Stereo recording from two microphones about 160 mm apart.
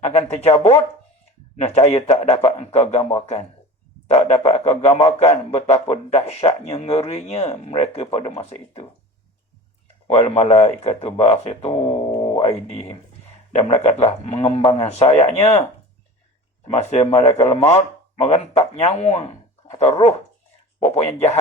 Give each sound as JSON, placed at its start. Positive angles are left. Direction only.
{"t": 0.0, "sound": "a man's voice", "side_deg": 40}
{"t": 10.1, "sound": "a man's voice", "side_deg": 40}
{"t": 16.6, "sound": "a man's voice", "side_deg": 40}